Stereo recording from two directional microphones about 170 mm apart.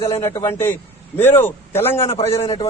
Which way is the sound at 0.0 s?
15° left (ahead or behind).